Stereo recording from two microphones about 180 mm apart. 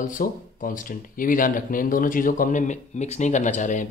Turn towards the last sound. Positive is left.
turn(degrees=45)  # may be behind; listen again after turning